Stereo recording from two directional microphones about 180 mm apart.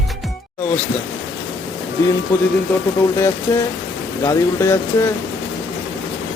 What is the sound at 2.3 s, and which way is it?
Music, 15° left (ahead or behind).